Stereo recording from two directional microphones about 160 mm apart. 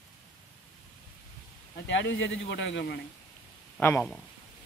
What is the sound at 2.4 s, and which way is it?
Speech, 90° left.